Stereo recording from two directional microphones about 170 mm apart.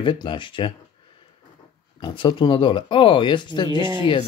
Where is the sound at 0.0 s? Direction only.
30° left (ahead or behind).